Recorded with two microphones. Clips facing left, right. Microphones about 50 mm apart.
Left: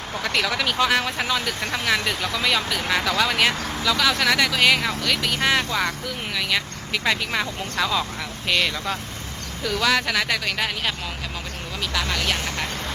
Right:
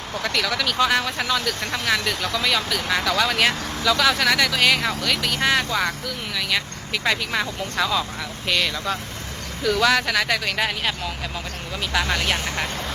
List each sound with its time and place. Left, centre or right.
0.1 s speech: centre
11.9 s speech: centre